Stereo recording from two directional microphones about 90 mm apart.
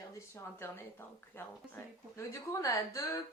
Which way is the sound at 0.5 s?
25° left (ahead or behind).